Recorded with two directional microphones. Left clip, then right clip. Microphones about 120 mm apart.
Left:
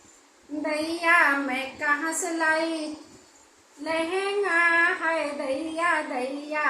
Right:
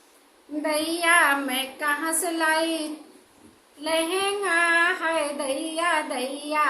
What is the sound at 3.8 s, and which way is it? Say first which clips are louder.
Child singing: right 2 dB; 15° right (ahead or behind).